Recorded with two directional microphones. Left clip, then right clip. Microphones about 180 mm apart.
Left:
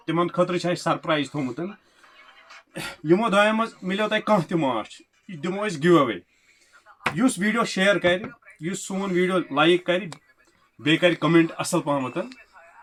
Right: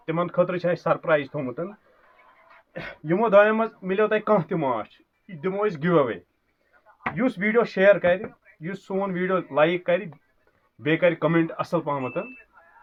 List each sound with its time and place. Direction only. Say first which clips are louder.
0.0 s speech: left 1 dB; 25° right (ahead or behind)
2.7 s speech: left 4 dB; 20° right (ahead or behind)
7.2 s speech: right 2 dB; 15° right (ahead or behind)